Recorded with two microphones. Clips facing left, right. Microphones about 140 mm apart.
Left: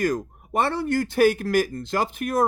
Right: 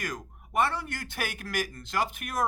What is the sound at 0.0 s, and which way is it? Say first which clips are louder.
Speech: left 13 dB; 35° left (ahead or behind).